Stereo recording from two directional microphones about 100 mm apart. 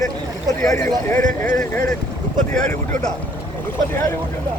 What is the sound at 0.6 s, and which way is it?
Speech, 35° left (ahead or behind).